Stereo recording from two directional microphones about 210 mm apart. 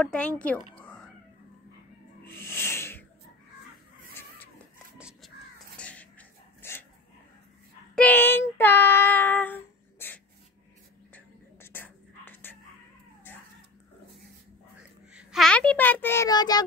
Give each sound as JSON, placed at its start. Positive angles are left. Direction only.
{"t": 0.0, "sound": "speech", "side_deg": 5}
{"t": 0.7, "sound": "cat", "side_deg": 5}
{"t": 2.2, "sound": "snake", "side_deg": 10}
{"t": 4.9, "sound": "crow", "side_deg": -5}
{"t": 5.8, "sound": "a sound", "side_deg": 5}
{"t": 7.9, "sound": "child singing", "side_deg": 5}
{"t": 11.1, "sound": "whispering", "side_deg": 10}
{"t": 13.3, "sound": "cat", "side_deg": 10}
{"t": 14.8, "sound": "a child's voice", "side_deg": 0}